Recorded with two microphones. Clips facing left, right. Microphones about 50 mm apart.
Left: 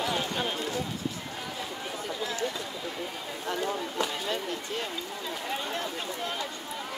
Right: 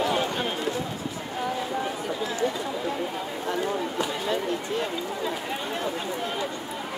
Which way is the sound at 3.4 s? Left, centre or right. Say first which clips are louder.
Right 3 dB; centre.